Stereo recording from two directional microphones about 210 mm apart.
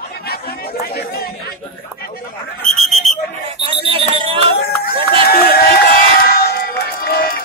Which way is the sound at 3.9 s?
25° right (ahead or behind).